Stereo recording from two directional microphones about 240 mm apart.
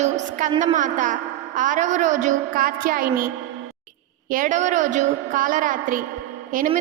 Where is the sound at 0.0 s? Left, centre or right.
Right.